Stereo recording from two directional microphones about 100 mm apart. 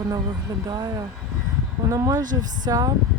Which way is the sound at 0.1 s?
45° right (ahead or behind).